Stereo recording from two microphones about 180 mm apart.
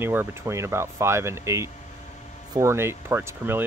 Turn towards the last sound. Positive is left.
turn(degrees=-15)  # may be behind; listen again after turning